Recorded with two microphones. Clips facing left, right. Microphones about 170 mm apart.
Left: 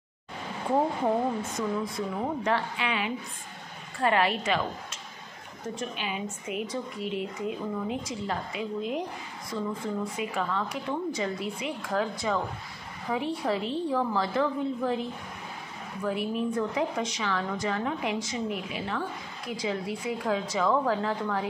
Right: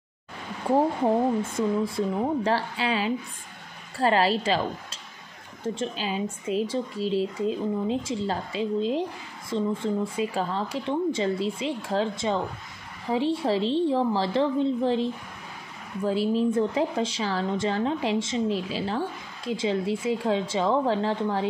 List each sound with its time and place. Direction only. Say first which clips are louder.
1.5 s speech: right 5 dB; 30° right (ahead or behind)
5.8 s a woman's voice: right 4 dB; 30° right (ahead or behind)